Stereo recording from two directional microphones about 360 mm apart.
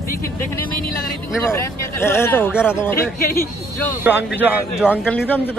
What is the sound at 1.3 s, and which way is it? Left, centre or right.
A man's voice, centre.